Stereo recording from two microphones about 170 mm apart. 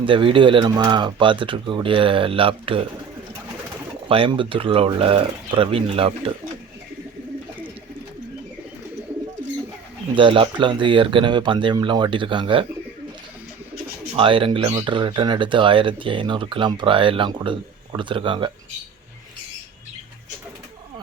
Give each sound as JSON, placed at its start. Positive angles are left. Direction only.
{"t": 0.0, "sound": "speech", "side_deg": -30}
{"t": 4.1, "sound": "speech", "side_deg": -30}
{"t": 10.2, "sound": "speech", "side_deg": -30}
{"t": 14.2, "sound": "speech", "side_deg": -30}